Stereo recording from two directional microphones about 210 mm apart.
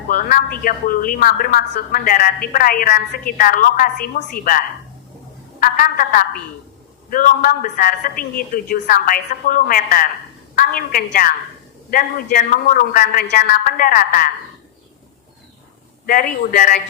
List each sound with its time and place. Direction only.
0.1 s a woman's voice: 40° left (ahead or behind)
16.0 s a woman's voice: 45° left (ahead or behind)